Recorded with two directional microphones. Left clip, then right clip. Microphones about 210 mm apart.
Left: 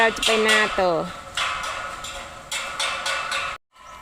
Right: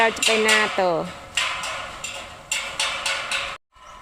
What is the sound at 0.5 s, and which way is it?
Speech, centre (ahead or behind).